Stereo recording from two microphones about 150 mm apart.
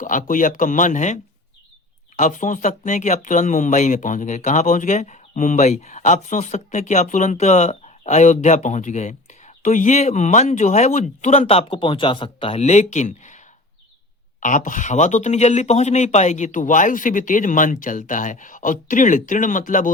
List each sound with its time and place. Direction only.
0.0 s speech: 60° left (ahead or behind)
14.4 s speech: 60° left (ahead or behind)